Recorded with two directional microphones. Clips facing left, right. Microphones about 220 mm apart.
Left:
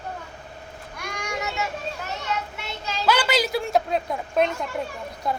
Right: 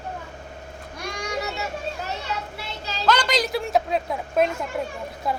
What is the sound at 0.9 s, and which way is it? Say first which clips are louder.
Children playing: right 2 dB; 35° right (ahead or behind).